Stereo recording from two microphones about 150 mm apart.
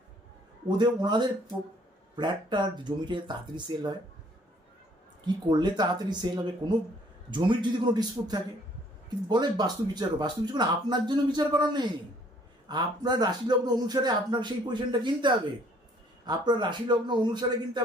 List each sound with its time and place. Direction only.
0.8 s speech: 30° right (ahead or behind)
5.2 s speech: 30° right (ahead or behind)